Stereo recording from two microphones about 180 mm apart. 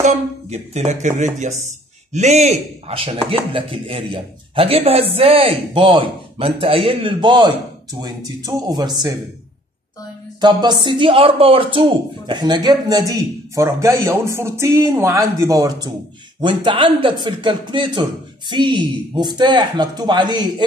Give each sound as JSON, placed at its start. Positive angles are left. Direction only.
{"t": 0.0, "sound": "speech", "side_deg": -40}
{"t": 10.4, "sound": "speech", "side_deg": -25}